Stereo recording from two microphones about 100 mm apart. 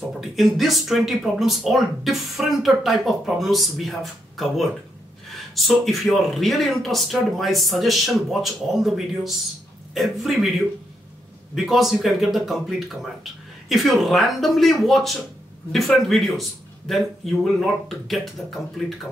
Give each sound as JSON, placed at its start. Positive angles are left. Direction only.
{"t": 0.2, "sound": "speech", "side_deg": 0}
{"t": 11.5, "sound": "speech", "side_deg": -5}